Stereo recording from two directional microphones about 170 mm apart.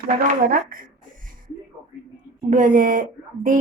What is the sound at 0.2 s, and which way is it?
Speech, 55° right (ahead or behind).